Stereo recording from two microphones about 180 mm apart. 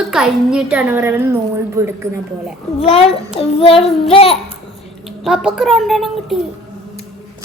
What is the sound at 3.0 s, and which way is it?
Child singing, 30° left (ahead or behind).